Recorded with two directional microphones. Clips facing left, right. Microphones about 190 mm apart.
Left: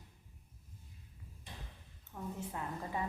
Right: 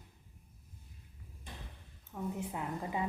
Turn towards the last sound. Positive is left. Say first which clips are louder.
# right 3 dB
turn(degrees=-15)  # may be behind; listen again after turning